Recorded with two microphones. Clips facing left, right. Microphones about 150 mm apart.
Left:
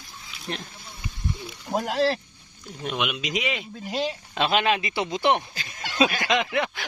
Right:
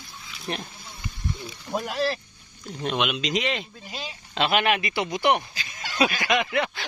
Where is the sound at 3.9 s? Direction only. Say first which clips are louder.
Left 15 dB; 65° left (ahead or behind).